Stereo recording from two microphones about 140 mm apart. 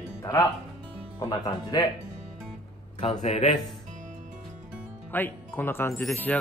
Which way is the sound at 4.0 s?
65° right (ahead or behind).